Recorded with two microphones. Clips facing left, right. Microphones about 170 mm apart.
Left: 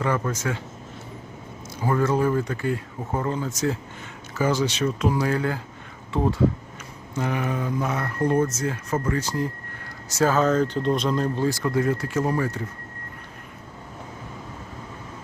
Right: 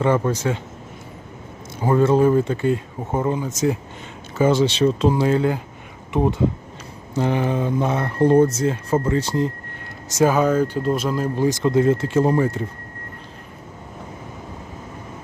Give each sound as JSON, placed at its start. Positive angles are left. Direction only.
{"t": 0.0, "sound": "speech", "side_deg": -30}
{"t": 1.8, "sound": "speech", "side_deg": -25}
{"t": 7.1, "sound": "speech", "side_deg": -30}
{"t": 11.4, "sound": "speech", "side_deg": -20}